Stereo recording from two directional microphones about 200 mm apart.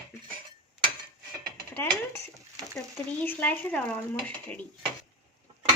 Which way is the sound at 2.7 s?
5° left (ahead or behind).